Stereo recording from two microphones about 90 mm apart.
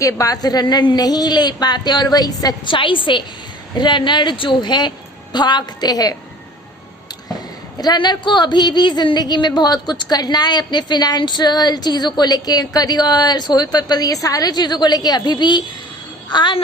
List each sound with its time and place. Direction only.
0.0 s a woman's voice: 40° left (ahead or behind)
2.6 s a woman's voice: 70° left (ahead or behind); by 6.1 s 45° left (ahead or behind)
7.8 s a woman's voice: 50° left (ahead or behind)